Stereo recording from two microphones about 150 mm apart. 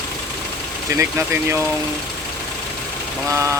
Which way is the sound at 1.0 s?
20° right (ahead or behind).